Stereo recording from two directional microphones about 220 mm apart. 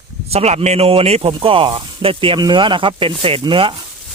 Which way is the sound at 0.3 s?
30° right (ahead or behind).